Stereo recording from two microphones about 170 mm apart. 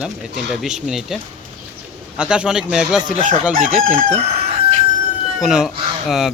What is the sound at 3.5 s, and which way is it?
Chicken, 55° right (ahead or behind).